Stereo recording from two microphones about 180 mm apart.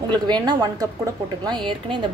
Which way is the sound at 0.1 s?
25° right (ahead or behind).